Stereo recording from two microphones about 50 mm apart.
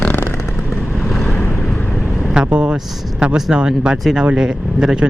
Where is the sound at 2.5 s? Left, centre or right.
Right.